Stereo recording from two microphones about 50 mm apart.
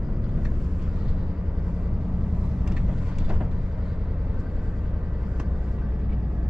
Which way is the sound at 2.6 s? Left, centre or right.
Centre.